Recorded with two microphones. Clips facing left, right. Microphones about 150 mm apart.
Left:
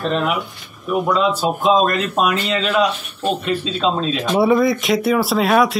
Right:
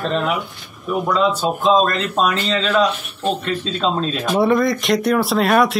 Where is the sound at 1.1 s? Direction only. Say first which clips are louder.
Even; 5° left (ahead or behind).